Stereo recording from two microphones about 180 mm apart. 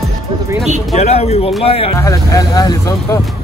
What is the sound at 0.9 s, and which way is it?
Speech, 35° left (ahead or behind).